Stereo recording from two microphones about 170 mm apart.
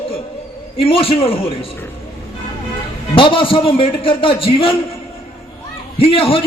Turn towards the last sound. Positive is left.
turn(degrees=35)  # may be behind; listen again after turning